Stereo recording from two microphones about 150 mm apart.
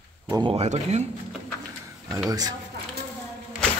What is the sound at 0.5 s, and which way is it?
Speech, 50° right (ahead or behind).